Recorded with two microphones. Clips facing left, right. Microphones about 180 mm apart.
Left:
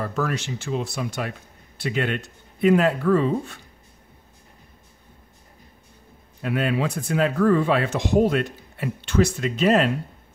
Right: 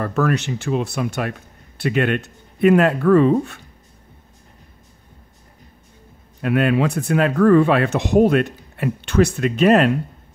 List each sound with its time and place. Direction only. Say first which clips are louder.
0.0 s speech: right 6 dB; 60° right (ahead or behind)
6.4 s speech: right 6 dB; 60° right (ahead or behind)